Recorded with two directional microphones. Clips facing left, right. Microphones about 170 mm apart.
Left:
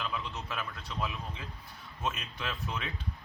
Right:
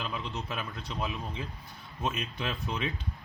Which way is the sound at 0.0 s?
20° right (ahead or behind).